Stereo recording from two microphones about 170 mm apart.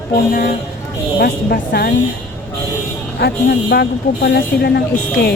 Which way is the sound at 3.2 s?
70° left (ahead or behind).